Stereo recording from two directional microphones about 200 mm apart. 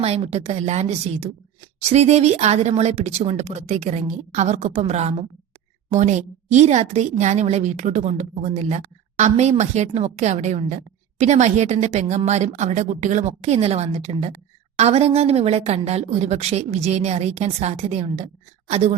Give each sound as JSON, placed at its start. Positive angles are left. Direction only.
{"t": 0.0, "sound": "a woman's voice", "side_deg": -30}